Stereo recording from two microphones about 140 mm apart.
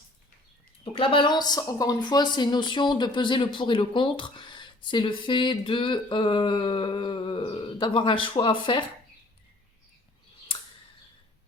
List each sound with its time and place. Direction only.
0.9 s speech: 35° left (ahead or behind)